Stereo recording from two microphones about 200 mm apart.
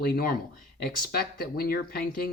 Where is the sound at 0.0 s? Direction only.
45° left (ahead or behind).